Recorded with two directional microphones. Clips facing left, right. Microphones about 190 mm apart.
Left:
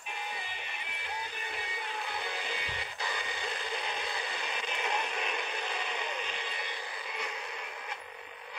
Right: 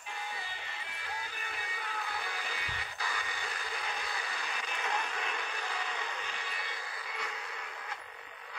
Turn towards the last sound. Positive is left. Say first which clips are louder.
# left 2 dB
turn(degrees=20)  # may be behind; listen again after turning